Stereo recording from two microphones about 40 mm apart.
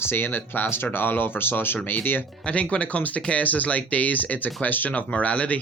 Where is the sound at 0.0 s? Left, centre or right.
Left.